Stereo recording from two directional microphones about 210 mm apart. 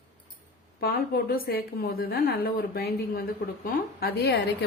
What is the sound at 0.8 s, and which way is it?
A woman's voice, 45° left (ahead or behind).